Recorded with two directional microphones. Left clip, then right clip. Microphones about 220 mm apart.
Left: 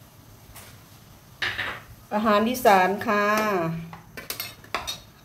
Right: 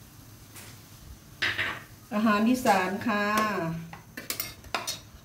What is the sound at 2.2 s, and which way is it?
Speech, 40° left (ahead or behind).